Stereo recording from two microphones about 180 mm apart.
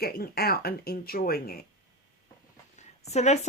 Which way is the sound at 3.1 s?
40° left (ahead or behind).